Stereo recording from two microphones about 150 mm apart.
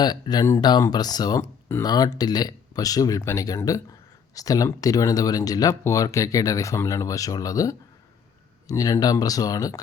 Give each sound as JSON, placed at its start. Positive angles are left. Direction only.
{"t": 0.0, "sound": "speech", "side_deg": 25}